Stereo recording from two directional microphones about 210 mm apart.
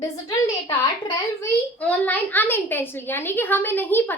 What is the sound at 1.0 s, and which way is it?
A child's voice, 10° left (ahead or behind).